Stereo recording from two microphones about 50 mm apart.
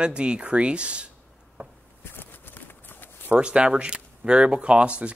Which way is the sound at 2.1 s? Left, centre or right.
Left.